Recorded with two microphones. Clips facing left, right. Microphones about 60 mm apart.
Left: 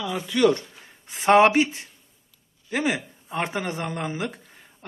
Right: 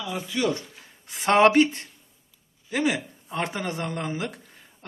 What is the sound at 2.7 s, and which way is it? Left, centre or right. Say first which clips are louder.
Speech: even; left.